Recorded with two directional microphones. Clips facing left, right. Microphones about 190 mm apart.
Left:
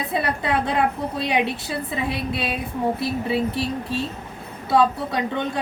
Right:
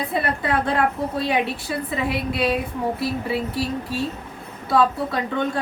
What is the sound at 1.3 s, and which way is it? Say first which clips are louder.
A woman's voice: even; 25° left (ahead or behind).